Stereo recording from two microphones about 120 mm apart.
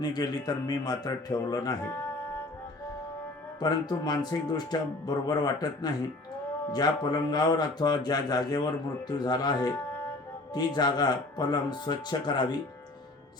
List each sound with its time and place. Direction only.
0.0 s speech: 35° left (ahead or behind)
3.6 s speech: 35° left (ahead or behind)